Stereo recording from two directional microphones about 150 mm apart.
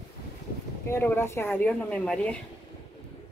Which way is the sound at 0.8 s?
15° left (ahead or behind).